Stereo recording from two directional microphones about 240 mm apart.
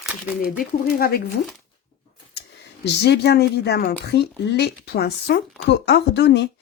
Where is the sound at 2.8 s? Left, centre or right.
Left.